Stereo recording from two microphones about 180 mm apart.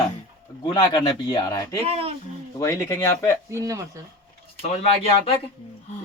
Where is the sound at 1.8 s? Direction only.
35° right (ahead or behind).